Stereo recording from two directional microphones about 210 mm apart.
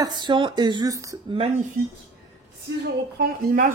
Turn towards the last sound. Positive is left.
turn(degrees=-40)  # may be behind; listen again after turning